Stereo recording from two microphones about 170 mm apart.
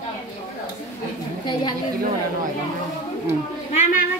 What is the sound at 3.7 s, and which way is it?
Speech, 50° left (ahead or behind).